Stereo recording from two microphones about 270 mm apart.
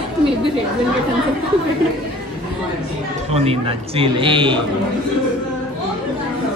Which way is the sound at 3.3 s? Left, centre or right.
Right.